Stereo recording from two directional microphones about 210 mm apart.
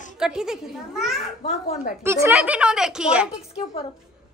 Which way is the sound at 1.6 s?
35° left (ahead or behind).